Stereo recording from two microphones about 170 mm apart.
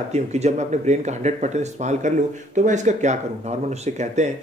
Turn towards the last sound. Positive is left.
turn(degrees=-45)  # may be behind; listen again after turning